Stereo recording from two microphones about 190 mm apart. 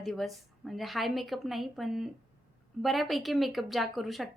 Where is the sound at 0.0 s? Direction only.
Centre (ahead or behind).